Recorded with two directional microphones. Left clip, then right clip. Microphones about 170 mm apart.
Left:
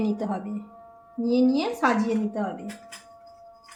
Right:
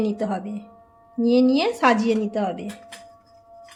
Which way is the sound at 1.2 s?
45° right (ahead or behind).